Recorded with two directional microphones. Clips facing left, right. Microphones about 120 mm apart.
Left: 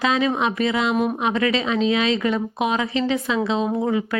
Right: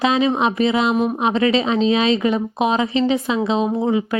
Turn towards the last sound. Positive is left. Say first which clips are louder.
# right 3 dB
turn(degrees=-20)  # may be behind; listen again after turning